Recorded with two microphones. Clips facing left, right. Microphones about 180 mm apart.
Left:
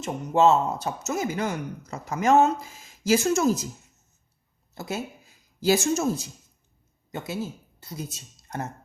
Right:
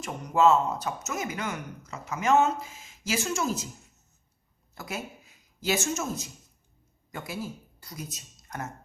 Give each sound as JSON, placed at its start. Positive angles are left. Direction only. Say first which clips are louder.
{"t": 0.0, "sound": "speech", "louder": "left 2 dB", "side_deg": 25}
{"t": 4.7, "sound": "speech", "louder": "left 5 dB", "side_deg": 25}
{"t": 7.1, "sound": "speech", "louder": "left 4 dB", "side_deg": 20}